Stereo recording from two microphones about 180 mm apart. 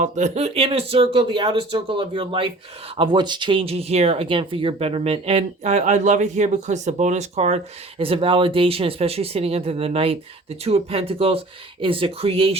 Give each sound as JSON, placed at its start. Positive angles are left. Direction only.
{"t": 0.0, "sound": "speech", "side_deg": -40}